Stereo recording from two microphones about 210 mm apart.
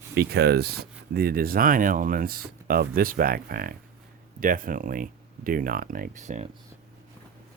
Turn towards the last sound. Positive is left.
turn(degrees=-35)  # may be behind; listen again after turning